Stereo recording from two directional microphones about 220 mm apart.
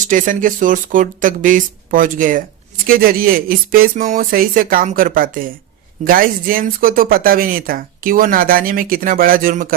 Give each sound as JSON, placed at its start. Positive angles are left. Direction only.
{"t": 0.1, "sound": "speech", "side_deg": -35}